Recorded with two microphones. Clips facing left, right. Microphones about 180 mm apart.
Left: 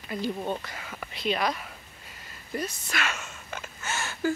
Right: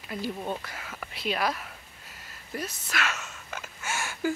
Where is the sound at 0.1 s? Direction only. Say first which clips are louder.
Left 2 dB; centre (ahead or behind).